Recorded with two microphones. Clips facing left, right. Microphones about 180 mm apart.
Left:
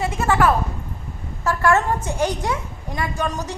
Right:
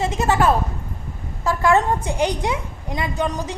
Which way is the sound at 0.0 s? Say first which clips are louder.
Even; 20° right (ahead or behind).